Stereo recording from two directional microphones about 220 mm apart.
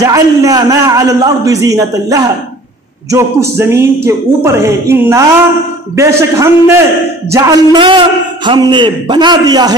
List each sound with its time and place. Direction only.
0.0 s a man's voice: 15° right (ahead or behind)